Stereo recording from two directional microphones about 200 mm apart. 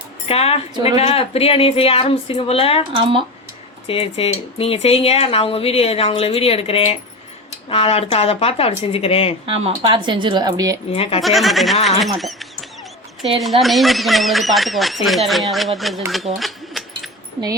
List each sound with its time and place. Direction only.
0.3 s a woman's voice: 30° left (ahead or behind)
2.9 s speech: 25° right (ahead or behind)
3.8 s speech: 30° left (ahead or behind)
9.5 s speech: 25° right (ahead or behind)
10.9 s speech: 30° left (ahead or behind)
11.2 s speech: centre (ahead or behind)